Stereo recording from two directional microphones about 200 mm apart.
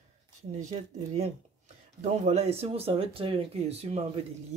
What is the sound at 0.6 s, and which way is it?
Speech, 35° right (ahead or behind).